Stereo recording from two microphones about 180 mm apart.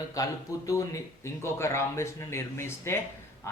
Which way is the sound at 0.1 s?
20° left (ahead or behind).